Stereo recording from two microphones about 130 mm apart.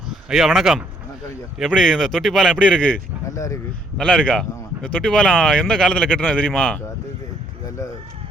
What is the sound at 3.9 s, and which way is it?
A man's voice, 10° left (ahead or behind).